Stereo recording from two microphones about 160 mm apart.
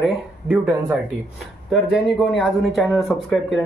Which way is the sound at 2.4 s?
Centre (ahead or behind).